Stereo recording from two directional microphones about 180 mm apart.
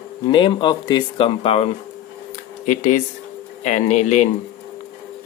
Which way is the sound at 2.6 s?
45° left (ahead or behind).